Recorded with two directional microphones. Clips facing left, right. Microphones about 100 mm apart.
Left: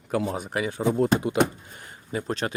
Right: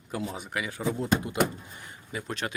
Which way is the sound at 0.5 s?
35° left (ahead or behind).